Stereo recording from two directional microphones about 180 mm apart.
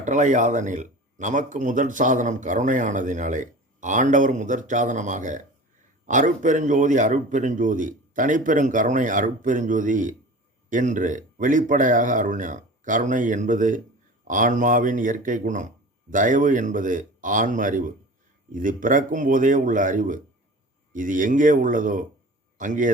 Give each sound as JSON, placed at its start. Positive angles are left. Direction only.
{"t": 0.0, "sound": "a man's voice", "side_deg": -45}